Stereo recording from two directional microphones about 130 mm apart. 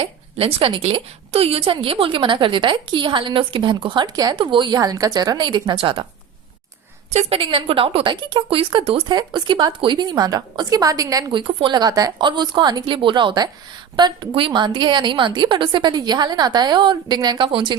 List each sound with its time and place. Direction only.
0.0 s a woman's voice: 45° right (ahead or behind)
7.1 s a woman's voice: 55° right (ahead or behind); by 11.3 s 25° right (ahead or behind)
11.3 s a woman's voice: 40° right (ahead or behind)